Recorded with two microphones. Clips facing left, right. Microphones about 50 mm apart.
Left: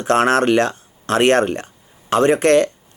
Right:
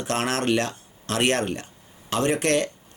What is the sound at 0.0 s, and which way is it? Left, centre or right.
Speech, left.